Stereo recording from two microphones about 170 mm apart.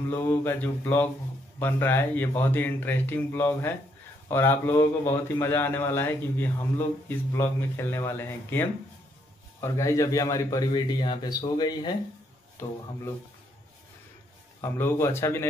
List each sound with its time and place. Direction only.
0.1 s a man's voice: 10° left (ahead or behind)
14.6 s a man's voice: 15° left (ahead or behind)